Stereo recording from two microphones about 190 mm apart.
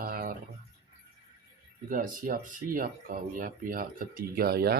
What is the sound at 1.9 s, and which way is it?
Speech, 45° right (ahead or behind).